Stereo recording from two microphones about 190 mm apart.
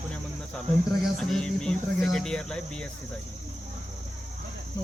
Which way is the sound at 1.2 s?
5° left (ahead or behind).